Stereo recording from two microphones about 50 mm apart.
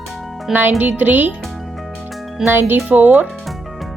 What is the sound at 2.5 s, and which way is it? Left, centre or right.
Speech, right.